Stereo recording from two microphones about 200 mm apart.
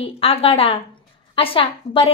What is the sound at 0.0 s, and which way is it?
A woman's voice, 30° left (ahead or behind).